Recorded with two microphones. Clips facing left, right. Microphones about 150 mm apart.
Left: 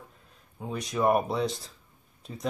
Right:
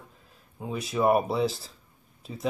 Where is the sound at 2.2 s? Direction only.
5° right (ahead or behind).